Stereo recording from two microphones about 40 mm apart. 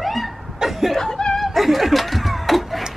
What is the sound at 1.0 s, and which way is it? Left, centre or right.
Laughter, centre.